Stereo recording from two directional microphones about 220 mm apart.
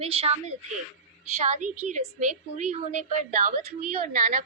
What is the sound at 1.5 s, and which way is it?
A woman's voice, 35° right (ahead or behind).